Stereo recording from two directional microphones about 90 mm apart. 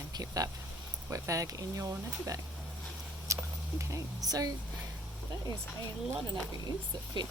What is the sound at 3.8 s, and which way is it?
Speech, 35° right (ahead or behind).